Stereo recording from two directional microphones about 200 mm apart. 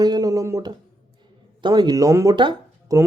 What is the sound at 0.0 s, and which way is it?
Speech, 20° right (ahead or behind).